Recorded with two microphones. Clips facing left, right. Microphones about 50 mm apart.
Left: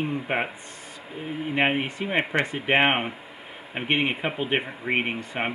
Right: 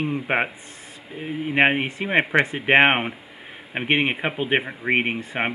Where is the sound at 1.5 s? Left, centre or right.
Right.